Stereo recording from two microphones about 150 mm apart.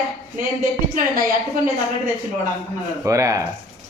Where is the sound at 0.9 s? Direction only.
65° right (ahead or behind).